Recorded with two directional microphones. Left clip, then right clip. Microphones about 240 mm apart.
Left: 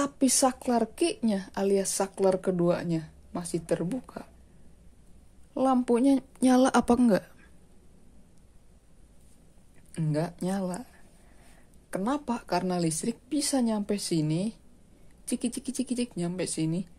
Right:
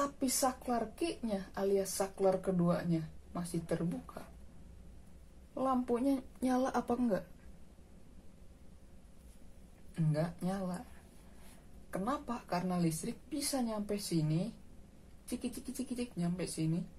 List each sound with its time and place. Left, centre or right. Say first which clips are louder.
0.0 s speech: left 8 dB; left
5.5 s speech: left 9 dB; left
9.9 s speech: left 6 dB; left
11.9 s speech: left 7 dB; left
16.0 s speech: left 8 dB; left